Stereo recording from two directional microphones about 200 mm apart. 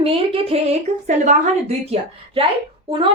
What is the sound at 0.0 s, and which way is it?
A woman's voice, 30° right (ahead or behind).